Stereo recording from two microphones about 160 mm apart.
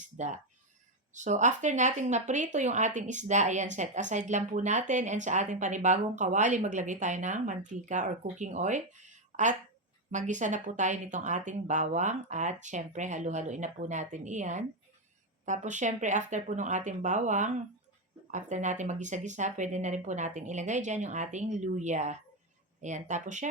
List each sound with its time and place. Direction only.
0.2 s speech: 45° right (ahead or behind)